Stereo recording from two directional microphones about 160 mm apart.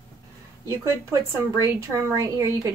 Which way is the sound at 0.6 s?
20° right (ahead or behind).